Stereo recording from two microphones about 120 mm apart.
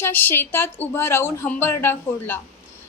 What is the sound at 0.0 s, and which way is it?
A woman's voice, 15° left (ahead or behind).